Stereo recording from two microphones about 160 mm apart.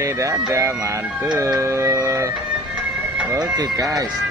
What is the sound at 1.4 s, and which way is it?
Speech, 20° right (ahead or behind).